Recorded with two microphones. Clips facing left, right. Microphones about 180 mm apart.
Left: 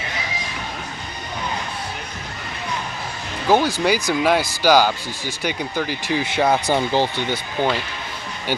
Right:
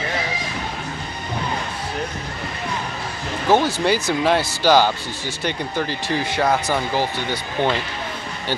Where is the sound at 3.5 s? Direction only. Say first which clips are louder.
Even; 15° left (ahead or behind).